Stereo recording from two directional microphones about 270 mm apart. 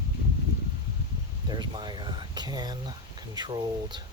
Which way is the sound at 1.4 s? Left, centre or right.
Centre.